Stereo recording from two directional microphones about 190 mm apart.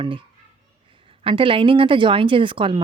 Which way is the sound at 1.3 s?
25° right (ahead or behind).